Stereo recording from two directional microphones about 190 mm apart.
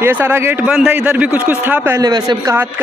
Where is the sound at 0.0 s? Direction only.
10° right (ahead or behind).